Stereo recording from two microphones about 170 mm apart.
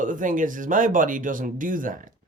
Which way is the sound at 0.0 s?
50° right (ahead or behind).